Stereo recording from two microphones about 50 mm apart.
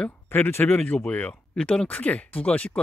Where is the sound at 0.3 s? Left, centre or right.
Left.